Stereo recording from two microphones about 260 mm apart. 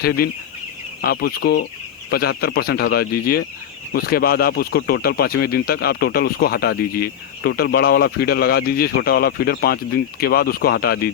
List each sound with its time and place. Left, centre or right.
0.0 s speech: left